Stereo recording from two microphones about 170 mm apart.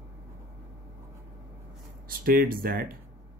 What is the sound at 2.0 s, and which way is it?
Speech, 55° right (ahead or behind).